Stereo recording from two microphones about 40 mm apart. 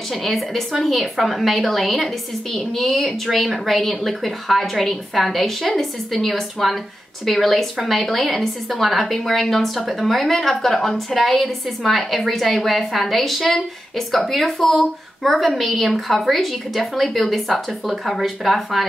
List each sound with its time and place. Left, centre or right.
0.1 s a woman's voice: centre